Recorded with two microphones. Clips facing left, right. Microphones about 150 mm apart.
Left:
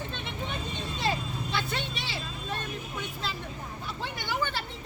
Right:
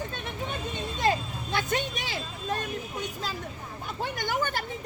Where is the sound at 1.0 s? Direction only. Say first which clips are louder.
Right 4 dB; 50° right (ahead or behind).